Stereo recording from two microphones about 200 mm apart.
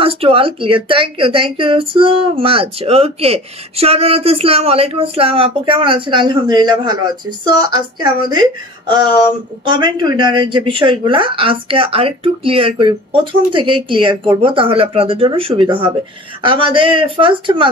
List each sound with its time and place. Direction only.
0.0 s speech: 30° right (ahead or behind)